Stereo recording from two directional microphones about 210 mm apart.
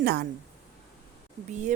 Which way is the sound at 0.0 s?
50° right (ahead or behind).